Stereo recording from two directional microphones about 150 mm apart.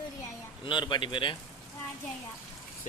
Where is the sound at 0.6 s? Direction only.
30° left (ahead or behind).